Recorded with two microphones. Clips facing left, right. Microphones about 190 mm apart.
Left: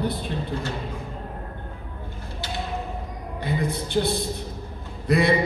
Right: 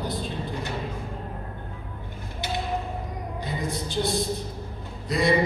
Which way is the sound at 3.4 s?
60° left (ahead or behind).